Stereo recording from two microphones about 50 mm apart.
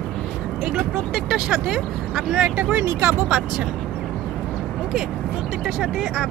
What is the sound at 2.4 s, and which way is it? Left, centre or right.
Speech, right.